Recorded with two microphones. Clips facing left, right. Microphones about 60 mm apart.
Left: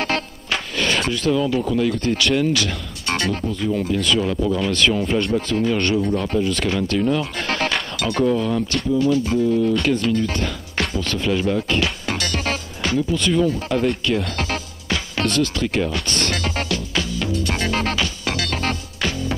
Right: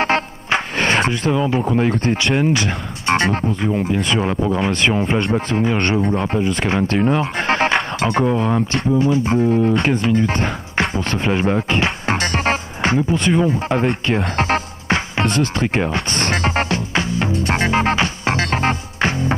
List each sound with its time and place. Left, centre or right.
0.0 s speech: right